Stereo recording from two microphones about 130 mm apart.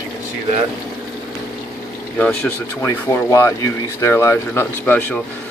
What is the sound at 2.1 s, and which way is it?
Speech, 10° left (ahead or behind).